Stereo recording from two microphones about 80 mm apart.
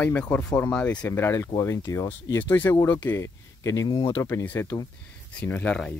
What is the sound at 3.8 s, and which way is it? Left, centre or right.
Speech, left.